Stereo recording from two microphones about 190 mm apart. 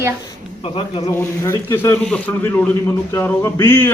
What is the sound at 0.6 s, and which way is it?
Speech, 30° left (ahead or behind).